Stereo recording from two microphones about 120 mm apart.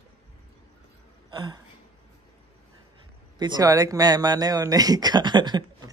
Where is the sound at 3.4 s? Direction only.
35° right (ahead or behind).